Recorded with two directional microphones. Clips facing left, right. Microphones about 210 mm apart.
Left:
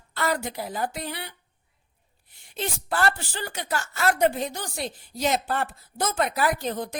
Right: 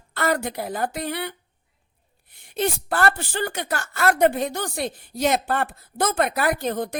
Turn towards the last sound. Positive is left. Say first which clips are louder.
# right 4 dB
turn(degrees=-60)  # may be behind; listen again after turning